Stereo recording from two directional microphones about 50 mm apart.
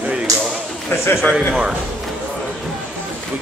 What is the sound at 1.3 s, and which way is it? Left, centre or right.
Speech, centre.